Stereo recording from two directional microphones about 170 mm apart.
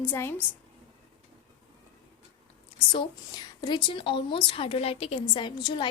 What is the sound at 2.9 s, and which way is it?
A woman's voice, 25° left (ahead or behind).